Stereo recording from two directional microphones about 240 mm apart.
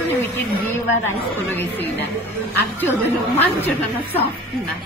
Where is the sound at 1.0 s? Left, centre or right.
Centre.